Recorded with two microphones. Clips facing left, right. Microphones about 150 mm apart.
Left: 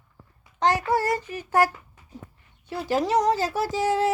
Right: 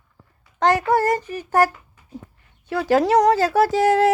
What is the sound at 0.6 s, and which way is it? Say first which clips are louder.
Child singing: right 5 dB; 55° right (ahead or behind).